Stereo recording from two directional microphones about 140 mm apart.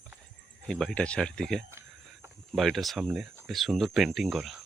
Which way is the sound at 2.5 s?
Centre (ahead or behind).